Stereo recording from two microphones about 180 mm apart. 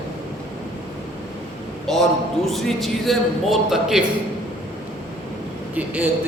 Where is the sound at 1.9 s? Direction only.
Centre (ahead or behind).